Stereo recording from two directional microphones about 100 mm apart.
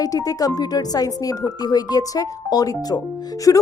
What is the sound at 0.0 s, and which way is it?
Speech, 35° left (ahead or behind).